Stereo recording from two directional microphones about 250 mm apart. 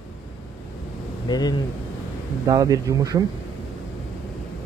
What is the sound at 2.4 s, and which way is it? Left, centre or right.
Speech, centre.